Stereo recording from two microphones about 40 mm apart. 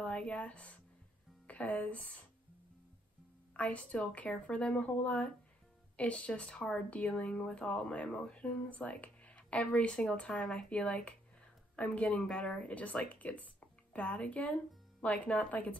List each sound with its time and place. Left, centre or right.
0.0 s a woman's voice: left
3.5 s a woman's voice: left